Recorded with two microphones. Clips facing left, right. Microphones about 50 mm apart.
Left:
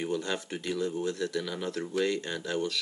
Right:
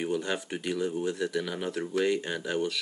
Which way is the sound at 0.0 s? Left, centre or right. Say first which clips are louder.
Right 1 dB; centre.